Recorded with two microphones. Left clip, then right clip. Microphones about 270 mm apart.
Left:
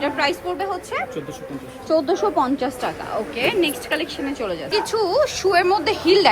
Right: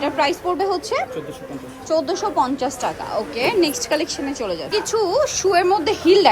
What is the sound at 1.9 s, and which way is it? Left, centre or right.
A woman's voice, centre.